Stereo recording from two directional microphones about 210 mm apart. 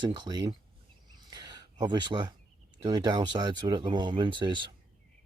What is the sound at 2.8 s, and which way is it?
Speech, 20° right (ahead or behind).